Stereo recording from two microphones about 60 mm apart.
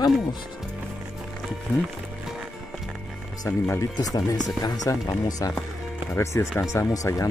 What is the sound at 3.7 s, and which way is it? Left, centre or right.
Speech, left.